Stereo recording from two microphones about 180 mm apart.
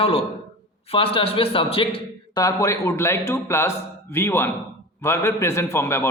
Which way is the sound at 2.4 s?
15° left (ahead or behind).